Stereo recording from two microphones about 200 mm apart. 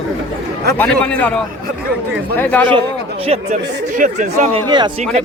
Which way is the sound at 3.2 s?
30° right (ahead or behind).